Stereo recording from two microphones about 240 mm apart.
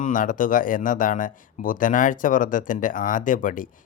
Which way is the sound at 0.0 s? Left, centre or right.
Left.